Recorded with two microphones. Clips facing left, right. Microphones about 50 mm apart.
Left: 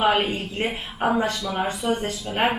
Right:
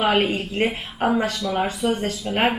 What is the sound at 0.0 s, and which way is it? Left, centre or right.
A woman's voice, centre.